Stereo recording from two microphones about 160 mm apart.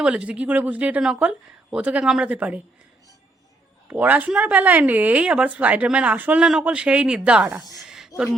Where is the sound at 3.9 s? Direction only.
10° right (ahead or behind).